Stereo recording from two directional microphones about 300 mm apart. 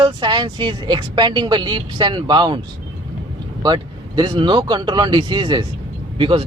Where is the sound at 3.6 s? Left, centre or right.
Centre.